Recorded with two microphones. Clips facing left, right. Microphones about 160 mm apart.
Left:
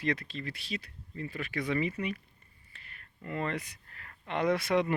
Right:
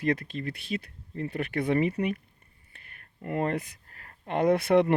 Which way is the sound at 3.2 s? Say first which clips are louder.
Right 6 dB; 50° right (ahead or behind).